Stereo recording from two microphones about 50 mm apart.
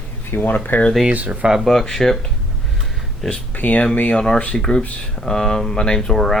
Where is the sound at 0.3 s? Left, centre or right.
Left.